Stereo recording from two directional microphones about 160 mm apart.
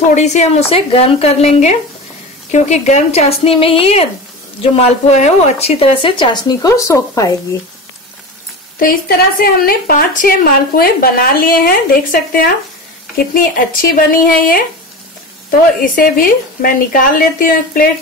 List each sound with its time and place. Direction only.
0.1 s a woman's voice: 45° left (ahead or behind); by 7.3 s 20° left (ahead or behind)
8.7 s a woman's voice: 65° left (ahead or behind)
15.8 s a woman's voice: 65° left (ahead or behind)